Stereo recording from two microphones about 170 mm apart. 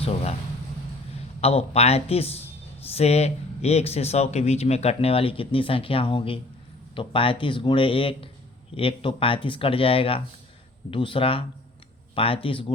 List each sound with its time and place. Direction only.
0.0 s speech: 35° left (ahead or behind)
1.4 s speech: 35° left (ahead or behind)